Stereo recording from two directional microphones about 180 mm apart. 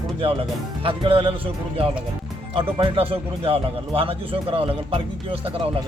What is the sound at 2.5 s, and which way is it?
Speech, 30° right (ahead or behind).